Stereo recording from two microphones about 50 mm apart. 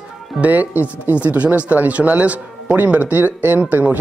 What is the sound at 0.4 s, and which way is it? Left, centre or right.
Speech, right.